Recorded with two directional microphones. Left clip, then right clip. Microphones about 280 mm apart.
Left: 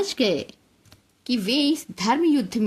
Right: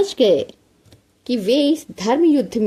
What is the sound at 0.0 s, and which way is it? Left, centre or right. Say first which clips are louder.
A woman's voice: right 8 dB; left.